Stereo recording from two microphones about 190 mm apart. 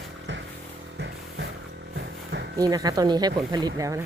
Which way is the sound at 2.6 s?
20° right (ahead or behind).